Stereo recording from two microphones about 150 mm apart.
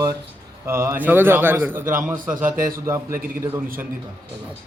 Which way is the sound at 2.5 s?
70° right (ahead or behind).